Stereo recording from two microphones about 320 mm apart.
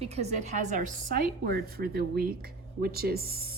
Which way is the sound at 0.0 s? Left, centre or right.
Centre.